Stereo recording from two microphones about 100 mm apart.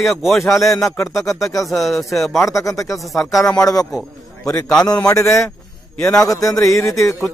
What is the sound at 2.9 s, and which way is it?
Speech, centre (ahead or behind).